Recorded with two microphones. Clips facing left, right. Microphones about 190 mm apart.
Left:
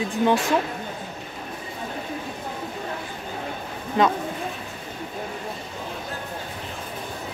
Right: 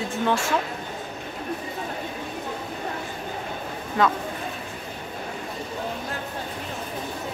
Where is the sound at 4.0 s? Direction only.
20° left (ahead or behind).